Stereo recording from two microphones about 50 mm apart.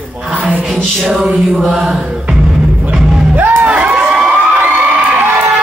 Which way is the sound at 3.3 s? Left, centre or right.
Right.